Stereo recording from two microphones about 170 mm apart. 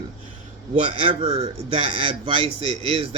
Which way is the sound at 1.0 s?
35° right (ahead or behind).